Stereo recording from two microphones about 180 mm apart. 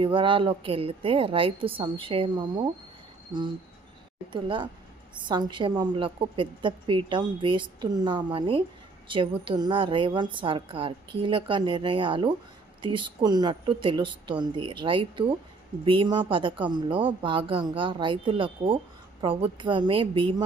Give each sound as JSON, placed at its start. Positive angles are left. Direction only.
{"t": 0.0, "sound": "a woman's voice", "side_deg": -30}